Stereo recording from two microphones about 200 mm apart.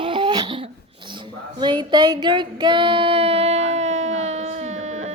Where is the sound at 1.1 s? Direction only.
25° right (ahead or behind).